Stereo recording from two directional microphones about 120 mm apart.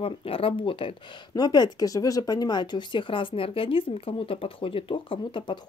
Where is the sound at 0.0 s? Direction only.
50° left (ahead or behind).